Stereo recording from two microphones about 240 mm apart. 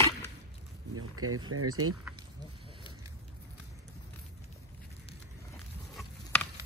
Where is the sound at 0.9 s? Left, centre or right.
Right.